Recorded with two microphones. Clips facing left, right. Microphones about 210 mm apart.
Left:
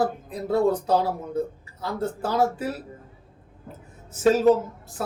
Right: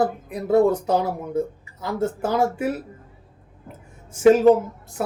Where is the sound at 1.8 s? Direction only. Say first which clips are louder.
Right 4 dB; 15° right (ahead or behind).